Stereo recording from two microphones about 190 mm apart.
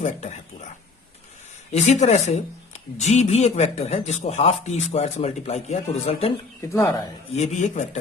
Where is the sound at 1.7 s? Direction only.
35° left (ahead or behind).